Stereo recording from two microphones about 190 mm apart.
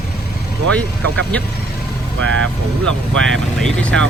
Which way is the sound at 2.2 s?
85° right.